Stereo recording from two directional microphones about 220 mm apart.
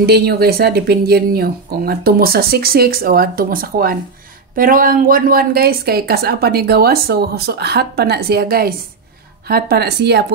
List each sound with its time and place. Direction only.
0.0 s a woman's voice: 45° right (ahead or behind)